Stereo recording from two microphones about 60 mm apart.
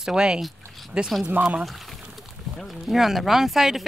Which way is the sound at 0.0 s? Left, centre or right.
Centre.